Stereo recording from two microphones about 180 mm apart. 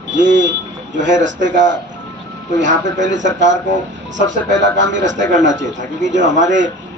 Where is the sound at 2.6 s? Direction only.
45° right (ahead or behind).